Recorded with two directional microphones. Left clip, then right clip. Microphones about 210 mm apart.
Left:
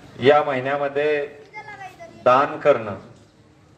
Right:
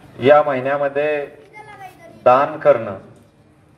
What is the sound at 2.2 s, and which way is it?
Speech, 50° right (ahead or behind).